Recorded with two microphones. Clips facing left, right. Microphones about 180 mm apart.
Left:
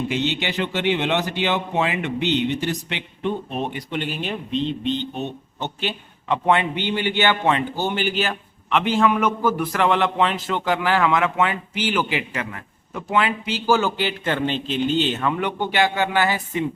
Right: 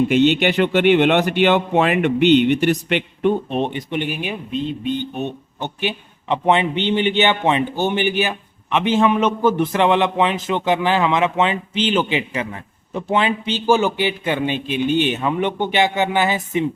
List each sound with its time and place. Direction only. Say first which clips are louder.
0.1 s speech: right 9 dB; 60° right (ahead or behind)
3.5 s speech: right 5 dB; 25° right (ahead or behind)